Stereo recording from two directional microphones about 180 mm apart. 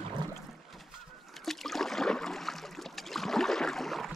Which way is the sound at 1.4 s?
Centre (ahead or behind).